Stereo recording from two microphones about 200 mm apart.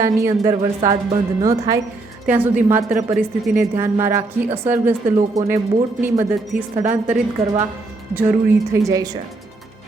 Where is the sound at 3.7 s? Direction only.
15° right (ahead or behind).